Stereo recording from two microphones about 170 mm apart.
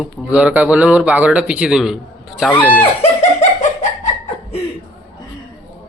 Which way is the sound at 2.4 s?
5° left (ahead or behind).